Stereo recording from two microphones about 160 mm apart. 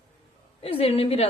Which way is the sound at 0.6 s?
35° left (ahead or behind).